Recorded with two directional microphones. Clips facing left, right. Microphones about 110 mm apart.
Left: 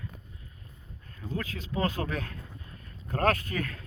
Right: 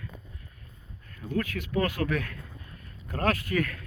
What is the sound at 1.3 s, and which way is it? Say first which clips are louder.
Speech: right 5 dB; 30° left (ahead or behind).